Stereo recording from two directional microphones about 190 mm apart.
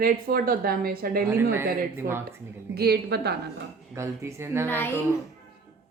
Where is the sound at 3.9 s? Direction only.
15° right (ahead or behind).